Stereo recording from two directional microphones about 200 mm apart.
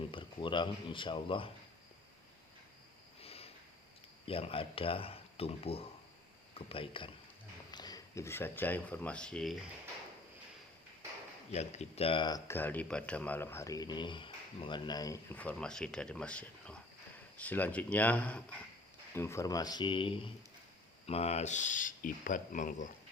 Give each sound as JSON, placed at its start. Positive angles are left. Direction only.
{"t": 0.1, "sound": "speech", "side_deg": 25}
{"t": 3.2, "sound": "a sound", "side_deg": 30}
{"t": 4.3, "sound": "speech", "side_deg": 30}
{"t": 11.5, "sound": "speech", "side_deg": 35}